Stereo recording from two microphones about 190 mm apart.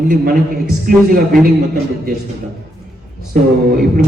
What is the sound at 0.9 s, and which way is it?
Speech, 50° right (ahead or behind).